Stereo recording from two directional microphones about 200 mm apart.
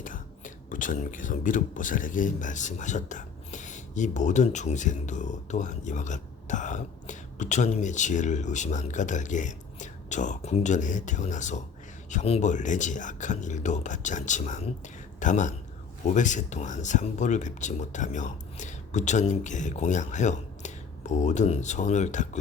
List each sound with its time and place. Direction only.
0.0 s speech: 40° left (ahead or behind)